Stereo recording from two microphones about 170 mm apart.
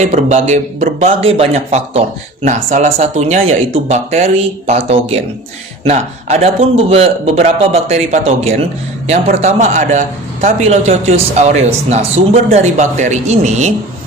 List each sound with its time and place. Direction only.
0.0 s speech: 40° right (ahead or behind)
1.2 s speech: 35° right (ahead or behind)